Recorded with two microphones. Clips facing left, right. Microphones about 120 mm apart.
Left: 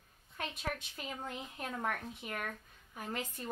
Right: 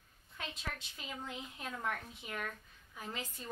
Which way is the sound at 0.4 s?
50° left (ahead or behind).